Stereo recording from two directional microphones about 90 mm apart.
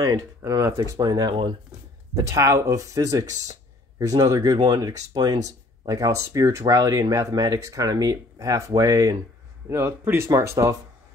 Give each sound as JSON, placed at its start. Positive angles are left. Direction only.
{"t": 0.0, "sound": "speech", "side_deg": -40}
{"t": 2.2, "sound": "speech", "side_deg": -35}
{"t": 9.7, "sound": "speech", "side_deg": -30}